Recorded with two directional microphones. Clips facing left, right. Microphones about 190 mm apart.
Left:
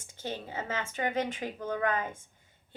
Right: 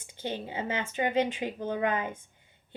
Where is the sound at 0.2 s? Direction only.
15° right (ahead or behind).